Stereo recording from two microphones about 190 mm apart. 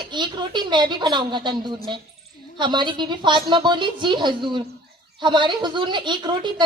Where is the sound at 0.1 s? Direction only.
25° right (ahead or behind).